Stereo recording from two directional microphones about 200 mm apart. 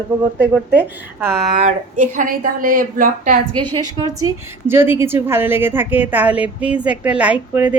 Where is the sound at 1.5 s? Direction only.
40° right (ahead or behind).